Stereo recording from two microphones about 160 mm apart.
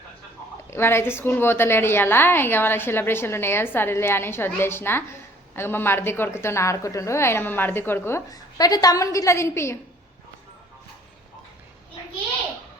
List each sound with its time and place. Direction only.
0.7 s a woman's voice: 15° left (ahead or behind)